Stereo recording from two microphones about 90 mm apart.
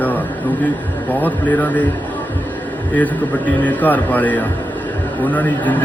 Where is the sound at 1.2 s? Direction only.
20° left (ahead or behind).